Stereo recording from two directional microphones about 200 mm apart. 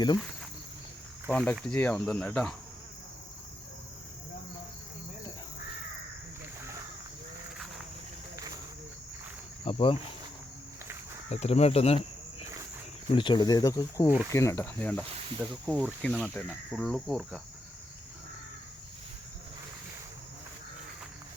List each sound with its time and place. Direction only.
1.3 s speech: centre (ahead or behind)
9.6 s speech: 30° left (ahead or behind)
11.3 s speech: 30° left (ahead or behind)
13.1 s speech: 25° left (ahead or behind); by 15.0 s 10° left (ahead or behind)
15.4 s speech: centre (ahead or behind)